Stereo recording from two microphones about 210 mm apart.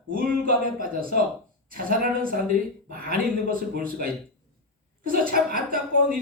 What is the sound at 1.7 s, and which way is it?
A woman's voice, 45° right (ahead or behind).